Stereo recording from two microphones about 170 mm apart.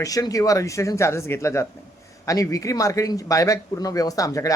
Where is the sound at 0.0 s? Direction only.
20° left (ahead or behind).